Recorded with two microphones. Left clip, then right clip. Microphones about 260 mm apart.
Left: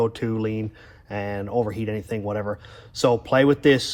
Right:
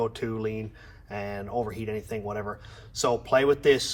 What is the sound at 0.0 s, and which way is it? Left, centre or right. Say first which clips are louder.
Speech: left 5 dB; left.